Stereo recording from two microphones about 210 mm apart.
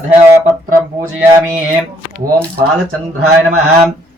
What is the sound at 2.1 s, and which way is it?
Speech, 5° left (ahead or behind).